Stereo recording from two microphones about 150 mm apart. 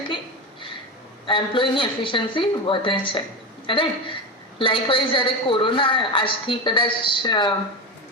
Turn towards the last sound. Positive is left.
turn(degrees=30)  # may be behind; listen again after turning